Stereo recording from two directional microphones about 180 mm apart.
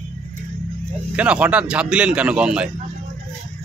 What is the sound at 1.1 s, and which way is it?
A man's voice, 5° right (ahead or behind).